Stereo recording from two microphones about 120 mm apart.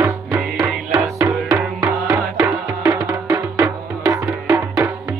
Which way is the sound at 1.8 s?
30° right (ahead or behind).